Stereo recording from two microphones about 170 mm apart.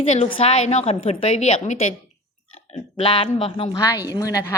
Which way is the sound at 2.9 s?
30° left (ahead or behind).